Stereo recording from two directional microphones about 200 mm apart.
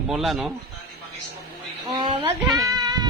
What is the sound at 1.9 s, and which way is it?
Speech, 20° right (ahead or behind).